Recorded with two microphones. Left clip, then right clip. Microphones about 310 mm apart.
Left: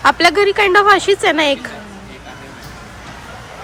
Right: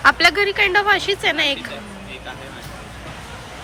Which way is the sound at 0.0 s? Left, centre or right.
Centre.